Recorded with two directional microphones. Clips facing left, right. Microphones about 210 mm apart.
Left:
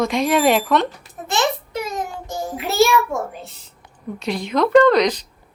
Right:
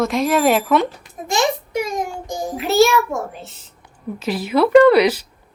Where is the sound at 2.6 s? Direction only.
Centre (ahead or behind).